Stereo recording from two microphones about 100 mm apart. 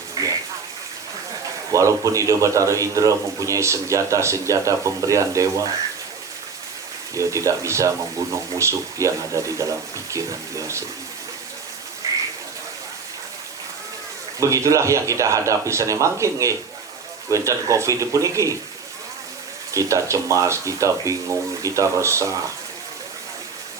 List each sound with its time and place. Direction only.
0.1 s a sound: 35° right (ahead or behind)
1.7 s a man's voice: 30° right (ahead or behind)
7.1 s a man's voice: 30° right (ahead or behind)
14.3 s a man's voice: 30° right (ahead or behind)
19.7 s a man's voice: 30° right (ahead or behind)